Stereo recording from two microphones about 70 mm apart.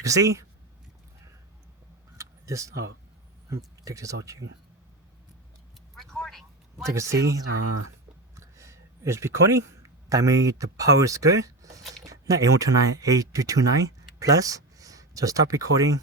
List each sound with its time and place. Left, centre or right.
0.0 s speech: right
2.1 s vehicle: right
3.8 s speech: right
6.0 s a sound: centre
6.8 s speech: right
11.8 s speech: centre
12.0 s speech: right